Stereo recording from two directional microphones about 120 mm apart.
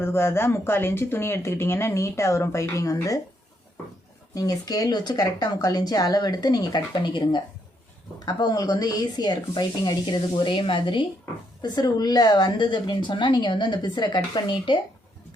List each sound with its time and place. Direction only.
0.0 s speech: 20° left (ahead or behind)
4.4 s speech: 30° left (ahead or behind)